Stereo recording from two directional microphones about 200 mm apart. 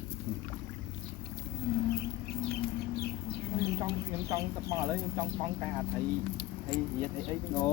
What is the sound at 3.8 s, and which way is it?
Speech, 15° right (ahead or behind).